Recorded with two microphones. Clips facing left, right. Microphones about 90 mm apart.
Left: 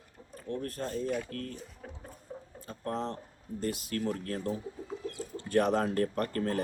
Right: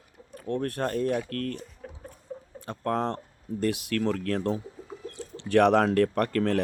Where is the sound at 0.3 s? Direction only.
65° right (ahead or behind).